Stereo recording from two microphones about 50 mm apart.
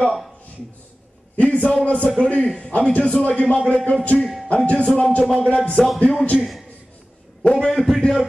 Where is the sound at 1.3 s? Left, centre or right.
Left.